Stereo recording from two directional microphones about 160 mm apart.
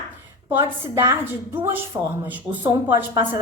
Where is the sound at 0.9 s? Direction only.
15° right (ahead or behind).